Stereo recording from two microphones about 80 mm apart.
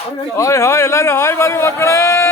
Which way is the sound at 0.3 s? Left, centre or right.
Left.